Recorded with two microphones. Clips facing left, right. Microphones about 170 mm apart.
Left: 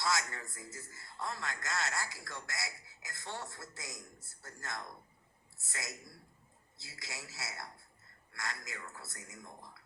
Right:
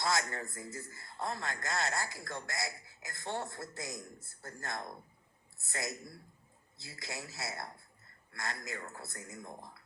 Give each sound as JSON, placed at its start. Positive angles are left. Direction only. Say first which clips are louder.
{"t": 0.0, "sound": "a man's voice", "louder": "right 2 dB", "side_deg": -50}
{"t": 1.5, "sound": "speech", "louder": "right 3 dB", "side_deg": -35}
{"t": 2.0, "sound": "a man's voice", "louder": "right 3 dB", "side_deg": -50}